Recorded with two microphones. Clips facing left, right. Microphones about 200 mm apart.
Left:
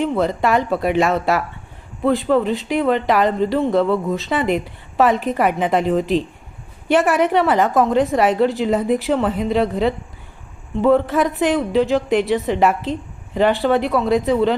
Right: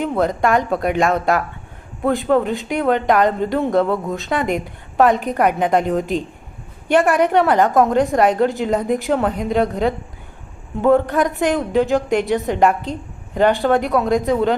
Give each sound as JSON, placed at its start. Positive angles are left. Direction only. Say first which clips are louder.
{"t": 0.0, "sound": "speech", "louder": "even", "side_deg": 0}